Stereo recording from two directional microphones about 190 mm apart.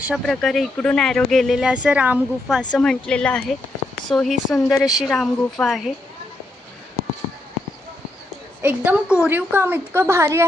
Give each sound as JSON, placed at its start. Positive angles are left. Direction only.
{"t": 0.0, "sound": "speech", "side_deg": 0}
{"t": 2.7, "sound": "speech", "side_deg": 5}
{"t": 8.6, "sound": "a woman's voice", "side_deg": -10}